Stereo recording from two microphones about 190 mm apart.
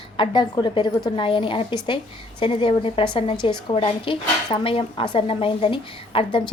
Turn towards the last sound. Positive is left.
turn(degrees=25)  # may be behind; listen again after turning